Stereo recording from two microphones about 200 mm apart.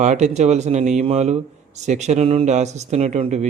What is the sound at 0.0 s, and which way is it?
Speech, 35° right (ahead or behind).